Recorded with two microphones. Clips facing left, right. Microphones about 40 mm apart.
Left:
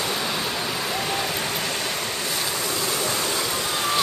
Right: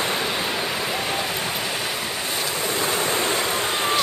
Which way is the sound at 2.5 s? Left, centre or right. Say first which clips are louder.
Right 3 dB; right.